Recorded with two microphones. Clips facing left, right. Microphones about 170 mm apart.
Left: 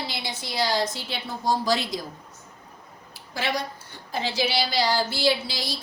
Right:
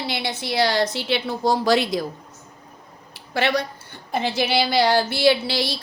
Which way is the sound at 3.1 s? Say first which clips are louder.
Right 6 dB; 65° right (ahead or behind).